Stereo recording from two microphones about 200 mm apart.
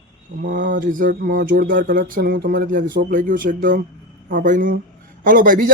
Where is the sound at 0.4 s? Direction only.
40° right (ahead or behind).